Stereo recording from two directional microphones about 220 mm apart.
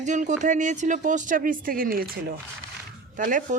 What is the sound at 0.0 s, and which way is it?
Speech, 35° right (ahead or behind).